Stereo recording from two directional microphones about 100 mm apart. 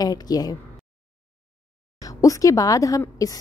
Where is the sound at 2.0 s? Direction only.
35° left (ahead or behind).